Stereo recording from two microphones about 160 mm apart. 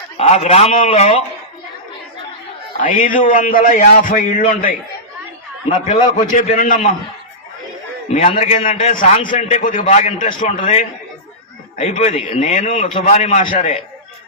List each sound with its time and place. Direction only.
0.2 s a man's voice: 40° left (ahead or behind)
2.8 s a man's voice: 55° left (ahead or behind)
8.1 s a man's voice: 45° left (ahead or behind)
9.1 s a man's voice: 40° left (ahead or behind)
13.5 s a man's voice: 60° left (ahead or behind)